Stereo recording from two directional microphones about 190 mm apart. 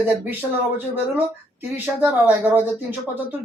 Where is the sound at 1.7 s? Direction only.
10° right (ahead or behind).